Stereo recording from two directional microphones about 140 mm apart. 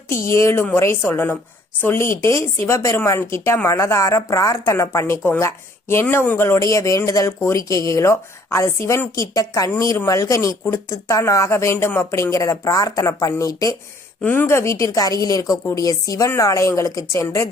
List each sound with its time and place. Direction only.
0.3 s a woman's voice: 20° left (ahead or behind)
14.2 s a woman's voice: 10° left (ahead or behind)